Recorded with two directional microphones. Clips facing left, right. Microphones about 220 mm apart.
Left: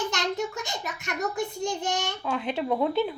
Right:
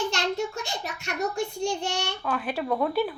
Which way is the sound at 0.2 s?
20° left (ahead or behind).